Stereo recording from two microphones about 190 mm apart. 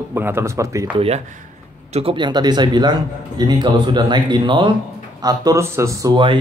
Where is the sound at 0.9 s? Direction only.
30° right (ahead or behind).